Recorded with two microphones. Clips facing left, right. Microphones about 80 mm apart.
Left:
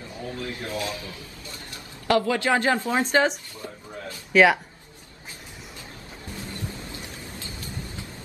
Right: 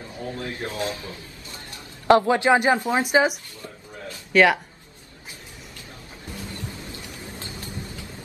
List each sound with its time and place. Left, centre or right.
0.3 s a woman's voice: right; by 3.3 s centre
4.3 s speech: centre